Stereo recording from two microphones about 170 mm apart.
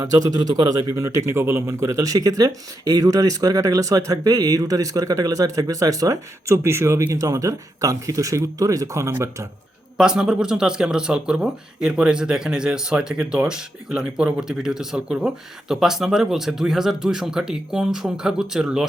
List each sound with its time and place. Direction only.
0.0 s a man's voice: 20° right (ahead or behind)
10.0 s speech: 5° right (ahead or behind)